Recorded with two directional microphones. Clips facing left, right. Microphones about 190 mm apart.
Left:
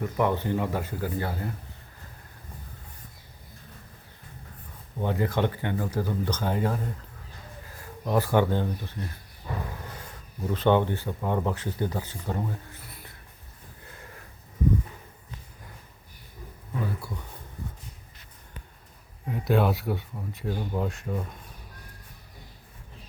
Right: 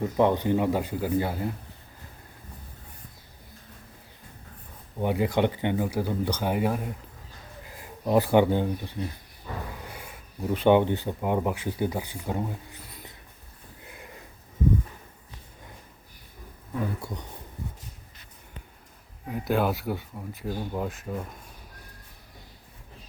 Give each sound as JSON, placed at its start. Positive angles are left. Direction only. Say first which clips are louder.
{"t": 0.0, "sound": "speech", "louder": "right 3 dB", "side_deg": -20}
{"t": 4.9, "sound": "speech", "louder": "right 2 dB", "side_deg": -15}
{"t": 13.8, "sound": "sniff", "louder": "right 2 dB", "side_deg": -15}
{"t": 17.0, "sound": "speech", "louder": "right 2 dB", "side_deg": -20}
{"t": 19.3, "sound": "speech", "louder": "left 1 dB", "side_deg": 0}